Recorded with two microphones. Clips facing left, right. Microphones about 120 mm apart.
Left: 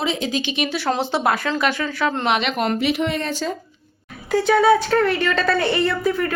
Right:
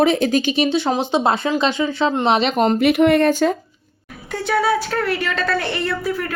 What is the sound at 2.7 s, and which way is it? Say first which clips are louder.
Speech: right 8 dB; 55° right (ahead or behind).